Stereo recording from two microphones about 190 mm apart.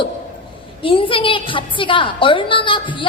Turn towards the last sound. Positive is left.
turn(degrees=25)  # may be behind; listen again after turning